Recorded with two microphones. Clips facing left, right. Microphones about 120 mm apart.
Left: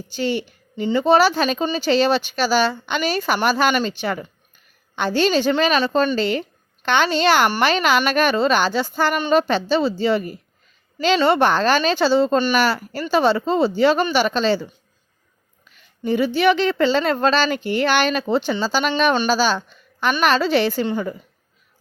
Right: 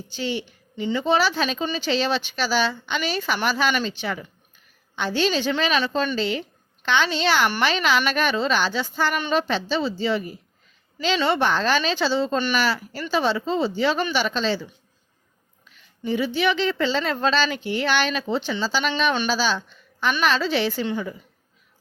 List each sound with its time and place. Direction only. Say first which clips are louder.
0.1 s speech: left 5 dB; 50° left (ahead or behind)
16.0 s speech: left 5 dB; 50° left (ahead or behind)